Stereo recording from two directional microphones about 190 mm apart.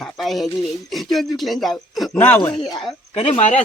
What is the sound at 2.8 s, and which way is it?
Speech, 35° left (ahead or behind).